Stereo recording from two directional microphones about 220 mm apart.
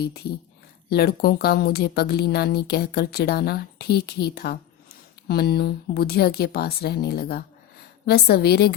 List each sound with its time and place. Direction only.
0.0 s a woman's voice: 45° left (ahead or behind)